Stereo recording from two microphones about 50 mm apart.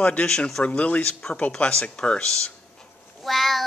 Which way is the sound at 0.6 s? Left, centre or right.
Left.